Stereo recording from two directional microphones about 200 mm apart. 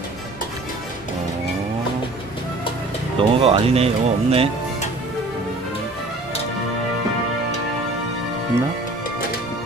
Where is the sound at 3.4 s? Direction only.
30° right (ahead or behind).